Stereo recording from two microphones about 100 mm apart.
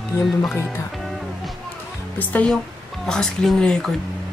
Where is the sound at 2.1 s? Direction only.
15° left (ahead or behind).